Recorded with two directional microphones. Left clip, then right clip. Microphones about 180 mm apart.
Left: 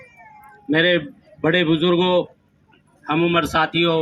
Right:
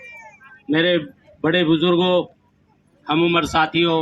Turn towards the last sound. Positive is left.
turn(degrees=20)  # may be behind; listen again after turning